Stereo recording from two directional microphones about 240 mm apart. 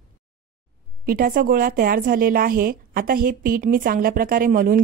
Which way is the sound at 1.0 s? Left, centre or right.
Right.